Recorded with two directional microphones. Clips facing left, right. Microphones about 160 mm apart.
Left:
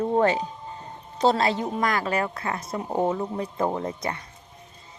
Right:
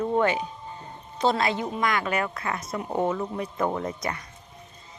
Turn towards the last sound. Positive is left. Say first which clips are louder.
# left 1 dB
turn(degrees=30)  # may be behind; listen again after turning